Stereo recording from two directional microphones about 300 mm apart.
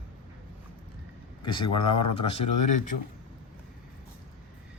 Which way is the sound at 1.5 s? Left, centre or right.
Centre.